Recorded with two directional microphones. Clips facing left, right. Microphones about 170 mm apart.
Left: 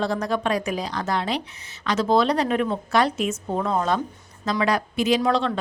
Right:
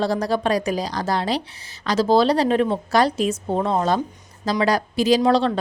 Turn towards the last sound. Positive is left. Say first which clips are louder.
# right 4 dB
turn(degrees=-35)  # may be behind; listen again after turning